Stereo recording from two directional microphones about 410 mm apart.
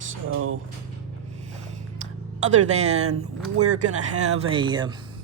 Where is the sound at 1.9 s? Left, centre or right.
Centre.